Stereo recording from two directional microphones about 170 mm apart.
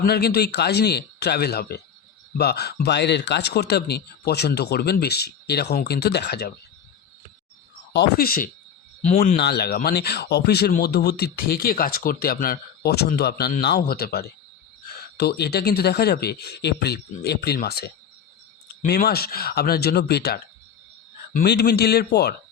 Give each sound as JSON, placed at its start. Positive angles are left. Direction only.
{"t": 0.0, "sound": "speech", "side_deg": 70}
{"t": 7.9, "sound": "speech", "side_deg": 70}
{"t": 21.4, "sound": "speech", "side_deg": 75}